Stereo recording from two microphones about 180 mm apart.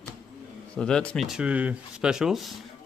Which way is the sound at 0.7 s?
5° left (ahead or behind).